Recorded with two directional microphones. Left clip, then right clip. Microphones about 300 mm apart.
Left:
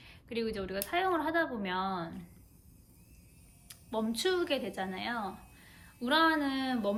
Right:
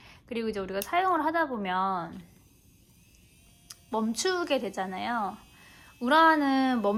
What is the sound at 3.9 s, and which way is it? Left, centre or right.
A woman's voice, centre.